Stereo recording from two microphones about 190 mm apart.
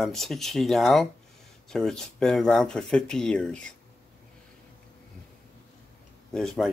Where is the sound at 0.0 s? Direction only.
Centre (ahead or behind).